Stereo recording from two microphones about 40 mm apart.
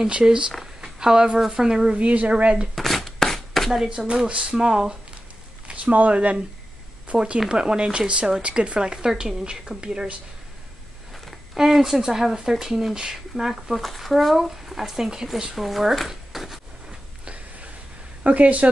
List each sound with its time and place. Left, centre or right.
0.2 s speech: right
0.7 s a sound: centre
1.5 s speech: centre
2.0 s a woman's voice: right
2.7 s a sound: centre
3.7 s speech: centre
4.1 s speech: right
5.9 s a woman's voice: right
7.2 s speech: right
11.5 s speech: centre
13.7 s speech: centre
17.2 s a sound: right
18.2 s a woman's voice: right